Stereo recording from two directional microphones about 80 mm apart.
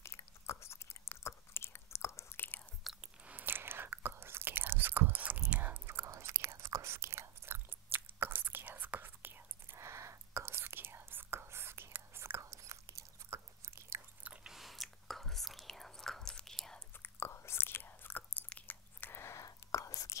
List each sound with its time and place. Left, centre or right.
0.0 s chewing: left
3.0 s chewing: right
5.6 s whispering: right
12.4 s chewing: right
14.2 s biting: centre
14.5 s whispering: centre
17.0 s chewing: left
19.3 s whispering: left